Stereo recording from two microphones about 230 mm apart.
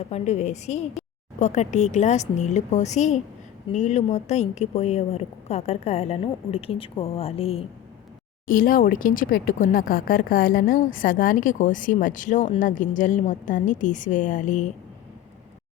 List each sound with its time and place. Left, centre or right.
0.0 s a woman's voice: left
8.4 s speech: left